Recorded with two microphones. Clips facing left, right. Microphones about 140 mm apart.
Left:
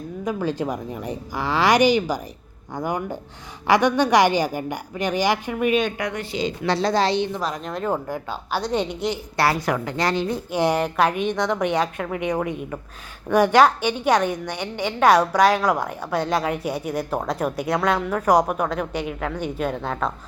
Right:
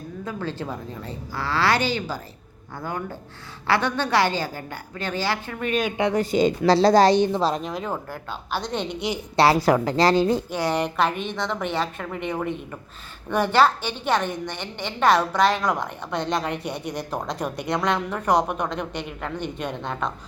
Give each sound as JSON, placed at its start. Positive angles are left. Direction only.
{"t": 0.3, "sound": "a woman's voice", "side_deg": 15}
{"t": 6.0, "sound": "a woman's voice", "side_deg": -30}
{"t": 6.3, "sound": "a woman's voice", "side_deg": -45}
{"t": 7.3, "sound": "speech", "side_deg": -25}
{"t": 7.6, "sound": "speech", "side_deg": 0}
{"t": 7.9, "sound": "a woman's voice", "side_deg": 15}
{"t": 9.3, "sound": "a woman's voice", "side_deg": -25}
{"t": 10.5, "sound": "a woman's voice", "side_deg": 15}